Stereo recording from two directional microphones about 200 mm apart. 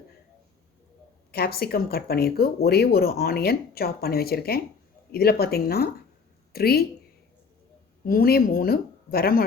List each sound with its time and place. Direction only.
1.3 s speech: 50° left (ahead or behind)
8.0 s speech: 45° left (ahead or behind)